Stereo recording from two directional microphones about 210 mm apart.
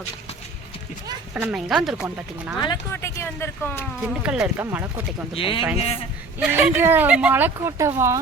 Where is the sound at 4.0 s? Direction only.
Centre (ahead or behind).